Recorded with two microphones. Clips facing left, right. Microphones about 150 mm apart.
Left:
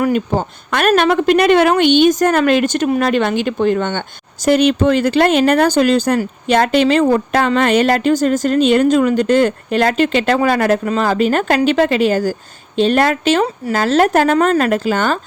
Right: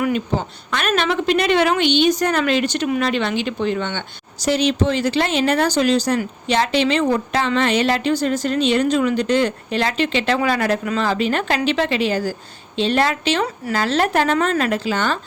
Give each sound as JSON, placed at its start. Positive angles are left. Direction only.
{"t": 0.0, "sound": "a woman's voice", "side_deg": 50}